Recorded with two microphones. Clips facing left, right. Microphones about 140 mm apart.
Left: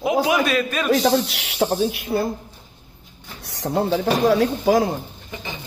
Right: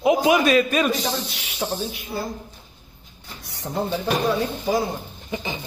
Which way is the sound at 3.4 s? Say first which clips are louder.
Left 5 dB; 80° left.